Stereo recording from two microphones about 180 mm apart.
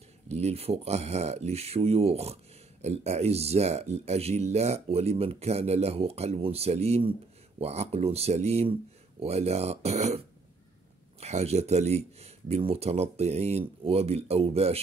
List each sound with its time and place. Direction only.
0.3 s speech: 35° right (ahead or behind)